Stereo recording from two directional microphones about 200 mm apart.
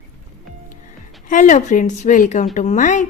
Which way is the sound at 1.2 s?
40° left (ahead or behind).